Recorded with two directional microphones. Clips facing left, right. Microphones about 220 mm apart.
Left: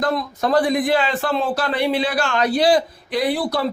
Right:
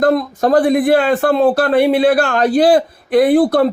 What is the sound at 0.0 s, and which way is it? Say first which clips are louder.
A man's voice: right 8 dB; 55° right (ahead or behind).